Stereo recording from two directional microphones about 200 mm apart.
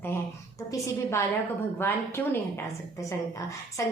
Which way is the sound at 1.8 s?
10° left (ahead or behind).